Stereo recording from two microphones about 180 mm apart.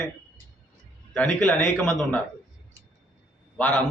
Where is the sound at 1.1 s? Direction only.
5° left (ahead or behind).